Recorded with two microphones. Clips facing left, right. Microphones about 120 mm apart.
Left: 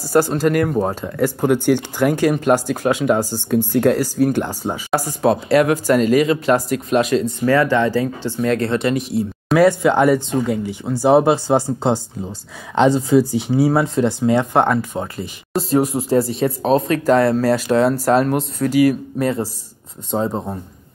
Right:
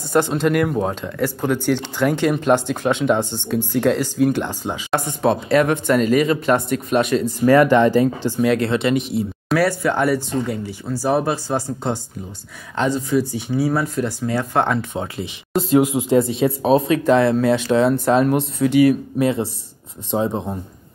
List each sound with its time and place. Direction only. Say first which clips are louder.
0.0 s speech: left 2 dB; 5° left (ahead or behind)
7.4 s speech: right 4 dB; 15° right (ahead or behind); by 9.6 s centre (ahead or behind)
9.6 s speech: left 6 dB; 20° left (ahead or behind)
14.7 s speech: left 2 dB; 5° left (ahead or behind)
15.8 s speech: right 1 dB; 30° left (ahead or behind)
16.1 s speech: right 1 dB; centre (ahead or behind)